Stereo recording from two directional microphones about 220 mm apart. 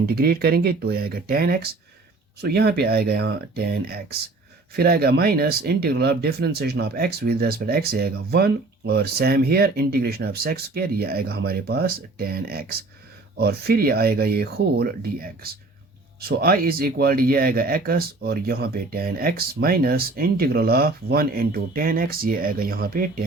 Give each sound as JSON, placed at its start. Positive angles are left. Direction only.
{"t": 0.0, "sound": "speech", "side_deg": -45}
{"t": 16.4, "sound": "speech", "side_deg": -45}